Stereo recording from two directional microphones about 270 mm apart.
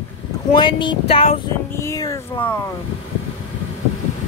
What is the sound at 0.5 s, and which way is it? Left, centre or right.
Speech, centre.